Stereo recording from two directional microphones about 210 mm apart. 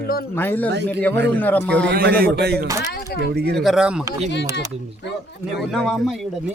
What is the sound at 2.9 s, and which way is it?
Speech, 50° left (ahead or behind).